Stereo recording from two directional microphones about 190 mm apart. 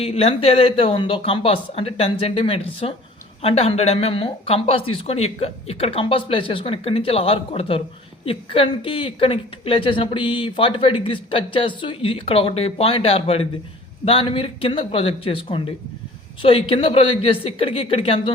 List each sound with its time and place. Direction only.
0.0 s speech: 30° left (ahead or behind)